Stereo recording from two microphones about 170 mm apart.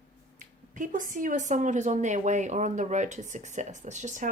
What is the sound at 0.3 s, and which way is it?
Speech, 50° right (ahead or behind).